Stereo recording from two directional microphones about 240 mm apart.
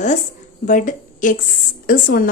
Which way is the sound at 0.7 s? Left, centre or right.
Left.